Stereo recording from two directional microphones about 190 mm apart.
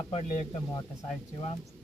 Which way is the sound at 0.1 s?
30° left (ahead or behind).